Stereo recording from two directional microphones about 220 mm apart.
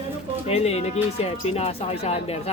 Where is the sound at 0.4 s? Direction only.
30° left (ahead or behind).